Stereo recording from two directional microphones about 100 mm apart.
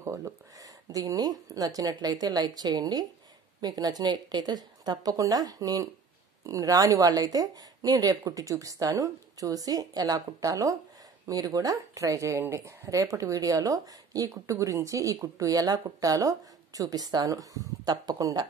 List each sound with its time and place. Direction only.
0.0 s a woman's voice: 30° right (ahead or behind)